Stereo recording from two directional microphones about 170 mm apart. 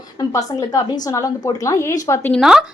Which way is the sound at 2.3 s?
Centre (ahead or behind).